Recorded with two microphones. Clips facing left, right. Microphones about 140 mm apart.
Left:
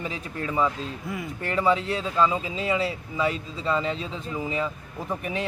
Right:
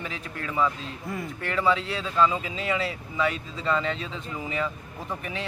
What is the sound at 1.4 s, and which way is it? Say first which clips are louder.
Speech: left 2 dB; 20° left (ahead or behind).